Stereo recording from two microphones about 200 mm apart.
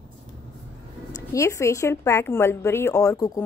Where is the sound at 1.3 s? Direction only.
15° left (ahead or behind).